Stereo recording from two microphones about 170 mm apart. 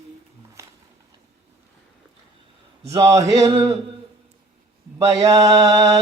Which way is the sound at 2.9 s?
20° right (ahead or behind).